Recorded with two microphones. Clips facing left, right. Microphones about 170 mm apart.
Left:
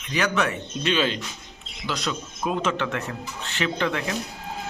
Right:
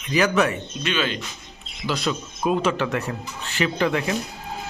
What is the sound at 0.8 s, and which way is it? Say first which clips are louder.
Speech: left 2 dB; 30° left (ahead or behind).